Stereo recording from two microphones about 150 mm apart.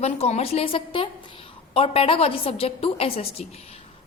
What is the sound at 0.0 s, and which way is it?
A woman's voice, 45° left (ahead or behind).